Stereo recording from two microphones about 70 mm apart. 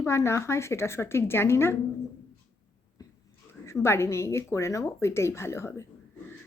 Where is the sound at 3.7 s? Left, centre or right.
Left.